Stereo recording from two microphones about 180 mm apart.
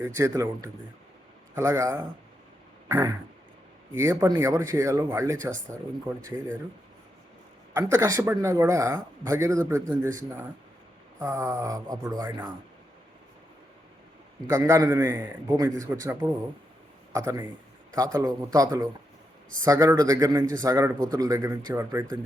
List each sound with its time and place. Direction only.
0.0 s a man's voice: 15° right (ahead or behind)
7.7 s a man's voice: 15° right (ahead or behind)
11.2 s a man's voice: 15° right (ahead or behind)
14.4 s a man's voice: 15° right (ahead or behind)
17.2 s a man's voice: 15° right (ahead or behind)